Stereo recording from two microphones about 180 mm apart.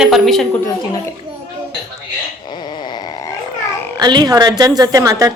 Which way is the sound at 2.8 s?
25° left (ahead or behind).